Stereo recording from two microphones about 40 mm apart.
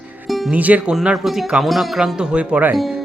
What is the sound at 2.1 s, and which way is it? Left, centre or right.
Speech, right.